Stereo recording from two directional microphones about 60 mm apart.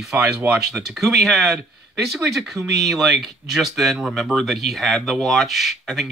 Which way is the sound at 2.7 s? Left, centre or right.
Centre.